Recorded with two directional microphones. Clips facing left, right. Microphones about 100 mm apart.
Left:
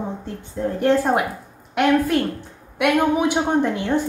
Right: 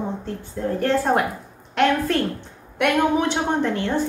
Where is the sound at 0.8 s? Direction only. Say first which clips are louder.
Left 2 dB; 15° left (ahead or behind).